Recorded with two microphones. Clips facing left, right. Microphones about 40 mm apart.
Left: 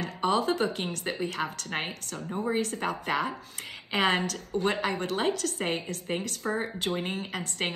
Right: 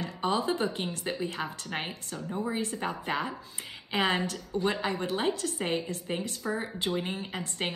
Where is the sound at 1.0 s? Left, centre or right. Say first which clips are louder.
Left 3 dB; left.